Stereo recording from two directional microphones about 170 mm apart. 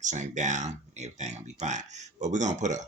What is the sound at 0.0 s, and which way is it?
Speech, 45° right (ahead or behind).